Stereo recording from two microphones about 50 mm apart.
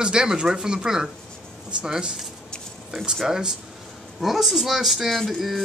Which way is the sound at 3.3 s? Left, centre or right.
Centre.